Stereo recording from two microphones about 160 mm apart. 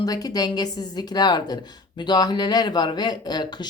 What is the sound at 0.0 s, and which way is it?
Speech, 25° left (ahead or behind).